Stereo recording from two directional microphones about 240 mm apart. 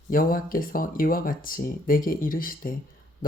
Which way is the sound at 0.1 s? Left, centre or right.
Left.